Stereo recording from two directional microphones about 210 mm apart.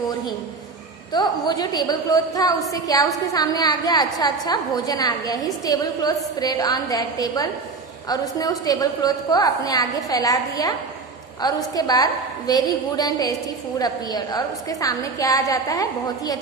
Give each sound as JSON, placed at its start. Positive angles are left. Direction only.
{"t": 1.1, "sound": "a woman's voice", "side_deg": 20}